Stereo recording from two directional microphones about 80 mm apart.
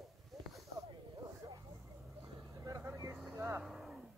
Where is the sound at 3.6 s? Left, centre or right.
Centre.